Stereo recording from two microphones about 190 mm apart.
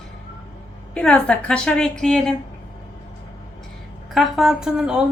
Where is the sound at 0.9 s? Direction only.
5° left (ahead or behind).